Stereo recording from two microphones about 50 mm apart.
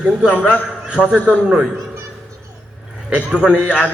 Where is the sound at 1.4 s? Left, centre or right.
Centre.